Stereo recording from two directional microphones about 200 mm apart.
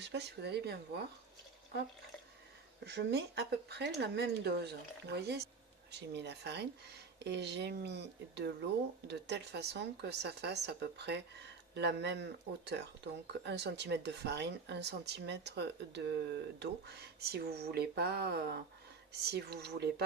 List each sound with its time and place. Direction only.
0.0 s speech: 60° right (ahead or behind)
2.8 s speech: 55° right (ahead or behind)